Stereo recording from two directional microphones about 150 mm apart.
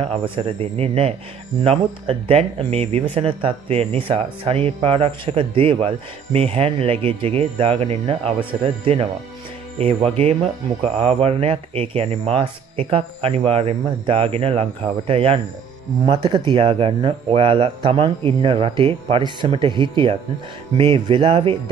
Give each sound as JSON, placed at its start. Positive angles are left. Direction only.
{"t": 0.0, "sound": "speech", "side_deg": -40}